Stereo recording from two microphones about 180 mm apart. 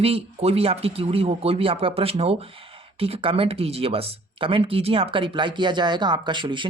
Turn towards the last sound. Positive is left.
turn(degrees=-25)  # may be behind; listen again after turning